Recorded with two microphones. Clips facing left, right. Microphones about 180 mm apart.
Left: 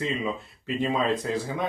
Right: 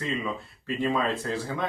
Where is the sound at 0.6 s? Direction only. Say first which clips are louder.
Left 1 dB; 15° left (ahead or behind).